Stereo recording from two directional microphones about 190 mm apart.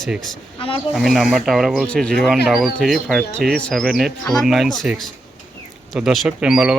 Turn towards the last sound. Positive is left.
turn(degrees=-5)  # may be behind; listen again after turning